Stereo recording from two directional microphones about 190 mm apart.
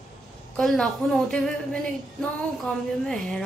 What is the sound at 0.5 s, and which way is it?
A man's voice, centre (ahead or behind).